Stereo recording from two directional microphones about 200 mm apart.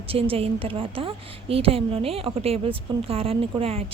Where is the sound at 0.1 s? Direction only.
30° right (ahead or behind).